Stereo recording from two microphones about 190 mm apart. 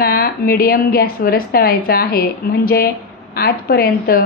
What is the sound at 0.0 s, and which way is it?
A woman's voice, 50° left (ahead or behind).